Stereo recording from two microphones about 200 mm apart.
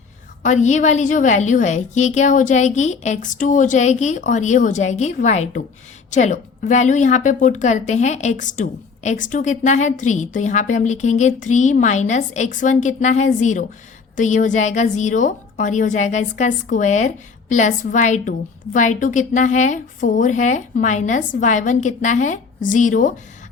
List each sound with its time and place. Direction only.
0.4 s a woman's voice: 35° left (ahead or behind)